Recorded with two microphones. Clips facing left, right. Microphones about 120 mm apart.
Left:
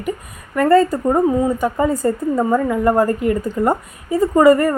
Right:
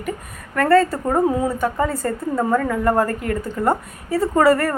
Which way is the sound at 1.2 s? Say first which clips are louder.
Left 3 dB; 5° right (ahead or behind).